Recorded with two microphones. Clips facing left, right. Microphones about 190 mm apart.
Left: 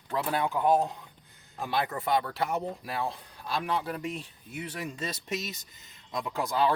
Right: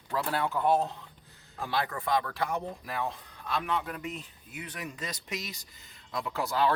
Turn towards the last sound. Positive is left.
turn(degrees=15)  # may be behind; listen again after turning